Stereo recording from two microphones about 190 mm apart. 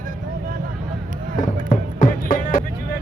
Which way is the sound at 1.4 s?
45° left (ahead or behind).